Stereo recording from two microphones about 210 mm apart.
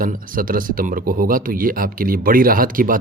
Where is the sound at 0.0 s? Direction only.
40° right (ahead or behind).